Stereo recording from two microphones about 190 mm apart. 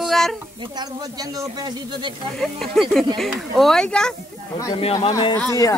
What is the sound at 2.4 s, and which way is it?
Speech, centre (ahead or behind).